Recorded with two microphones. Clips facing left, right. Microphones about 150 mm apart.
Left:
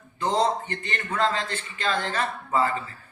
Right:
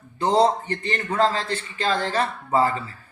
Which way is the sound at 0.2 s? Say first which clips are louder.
Right 5 dB; 35° right (ahead or behind).